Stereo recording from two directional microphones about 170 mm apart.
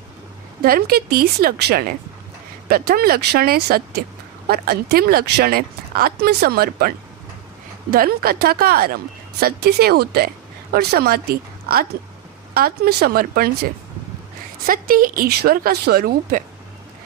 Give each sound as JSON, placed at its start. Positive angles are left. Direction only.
{"t": 0.6, "sound": "speech", "side_deg": -60}
{"t": 7.9, "sound": "a woman's voice", "side_deg": -60}
{"t": 14.7, "sound": "speech", "side_deg": -55}